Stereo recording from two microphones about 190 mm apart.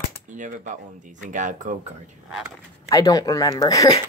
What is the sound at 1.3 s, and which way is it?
Speech, 40° right (ahead or behind).